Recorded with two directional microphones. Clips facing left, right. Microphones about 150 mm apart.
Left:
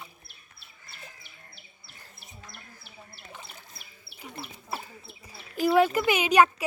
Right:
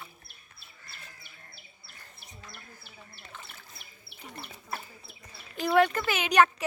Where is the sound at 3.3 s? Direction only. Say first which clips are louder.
Left 2 dB; 15° left (ahead or behind).